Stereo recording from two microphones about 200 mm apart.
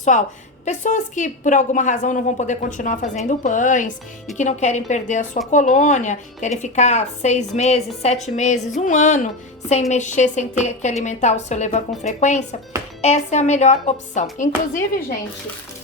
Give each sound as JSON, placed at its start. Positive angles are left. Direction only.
{"t": 0.6, "sound": "speech", "side_deg": 35}